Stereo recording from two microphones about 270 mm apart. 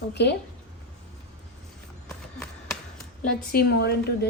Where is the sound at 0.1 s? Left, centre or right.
Left.